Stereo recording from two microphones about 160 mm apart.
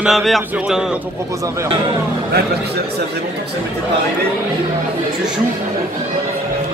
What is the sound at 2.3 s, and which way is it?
Speech, 80° right.